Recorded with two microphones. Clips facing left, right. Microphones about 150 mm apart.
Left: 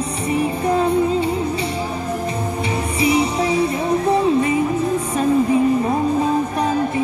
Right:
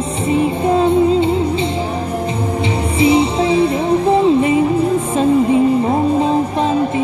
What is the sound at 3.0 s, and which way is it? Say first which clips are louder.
Music: right 5 dB; 25° right (ahead or behind).